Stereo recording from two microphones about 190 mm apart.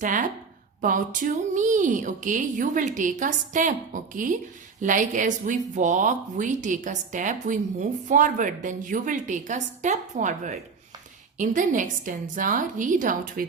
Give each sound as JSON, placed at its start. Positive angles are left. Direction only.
{"t": 0.0, "sound": "a woman's voice", "side_deg": -45}